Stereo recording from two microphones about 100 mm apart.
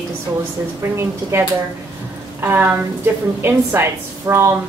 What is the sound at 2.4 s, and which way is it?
Speech, 20° right (ahead or behind).